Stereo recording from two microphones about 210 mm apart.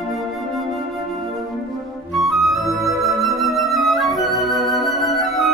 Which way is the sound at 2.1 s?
Centre (ahead or behind).